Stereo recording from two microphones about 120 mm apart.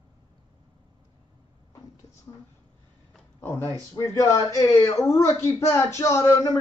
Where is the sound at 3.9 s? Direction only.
25° left (ahead or behind).